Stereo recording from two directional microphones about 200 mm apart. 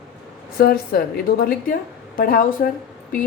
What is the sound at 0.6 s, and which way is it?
A woman's voice, 50° left (ahead or behind).